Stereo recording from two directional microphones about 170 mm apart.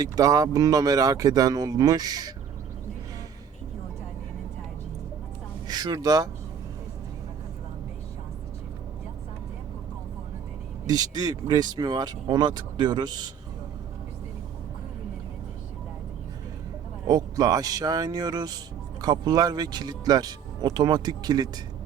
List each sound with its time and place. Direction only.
0.0 s speech: 20° right (ahead or behind)
5.6 s speech: 25° right (ahead or behind)
10.8 s speech: 25° right (ahead or behind)
17.1 s speech: 20° right (ahead or behind)